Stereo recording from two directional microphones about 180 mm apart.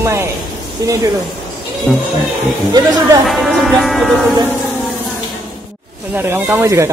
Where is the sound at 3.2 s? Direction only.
Centre (ahead or behind).